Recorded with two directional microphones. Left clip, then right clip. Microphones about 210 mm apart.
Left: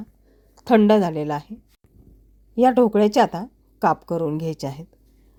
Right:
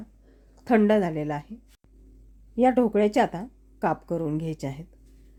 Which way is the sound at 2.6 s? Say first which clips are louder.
Left 5 dB; 20° left (ahead or behind).